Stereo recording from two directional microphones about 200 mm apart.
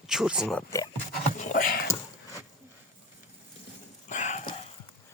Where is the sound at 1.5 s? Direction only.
45° left (ahead or behind).